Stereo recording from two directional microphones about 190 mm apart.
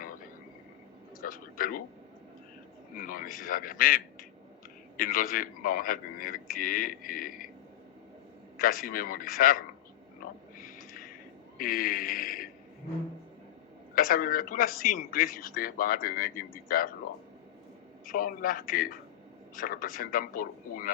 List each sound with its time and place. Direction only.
1.2 s a man's voice: 45° left (ahead or behind)
2.9 s a man's voice: 45° left (ahead or behind)
8.5 s a man's voice: 45° left (ahead or behind)
10.6 s a sound: 45° left (ahead or behind)
11.5 s a man's voice: 50° left (ahead or behind)
13.9 s a man's voice: 50° left (ahead or behind)
18.0 s a man's voice: 45° left (ahead or behind)